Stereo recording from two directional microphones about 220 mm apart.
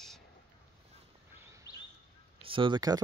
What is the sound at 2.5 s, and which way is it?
Speech, 20° right (ahead or behind).